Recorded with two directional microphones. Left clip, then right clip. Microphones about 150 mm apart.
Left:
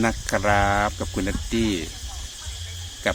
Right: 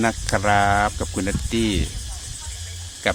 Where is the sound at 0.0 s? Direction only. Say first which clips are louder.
Right 2 dB; 25° right (ahead or behind).